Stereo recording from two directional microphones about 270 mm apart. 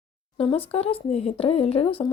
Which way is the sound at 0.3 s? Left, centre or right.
Left.